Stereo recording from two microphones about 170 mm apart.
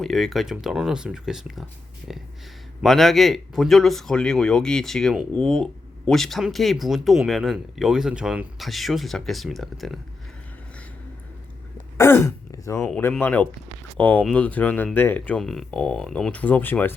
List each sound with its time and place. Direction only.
0.0 s speech: centre (ahead or behind)
11.9 s speech: 15° left (ahead or behind)